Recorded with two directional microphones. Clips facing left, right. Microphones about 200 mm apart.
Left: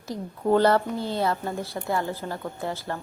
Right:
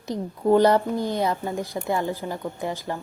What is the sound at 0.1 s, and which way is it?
Speech, 15° right (ahead or behind).